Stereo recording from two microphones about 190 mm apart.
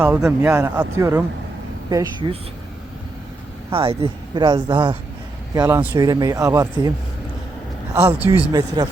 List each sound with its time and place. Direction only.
0.0 s speech: 10° right (ahead or behind)
3.7 s speech: 30° right (ahead or behind)
5.5 s speech: 15° right (ahead or behind)
7.9 s speech: 15° right (ahead or behind)